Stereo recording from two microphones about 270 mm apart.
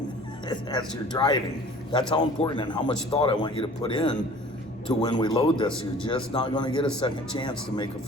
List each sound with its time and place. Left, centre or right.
0.4 s speech: centre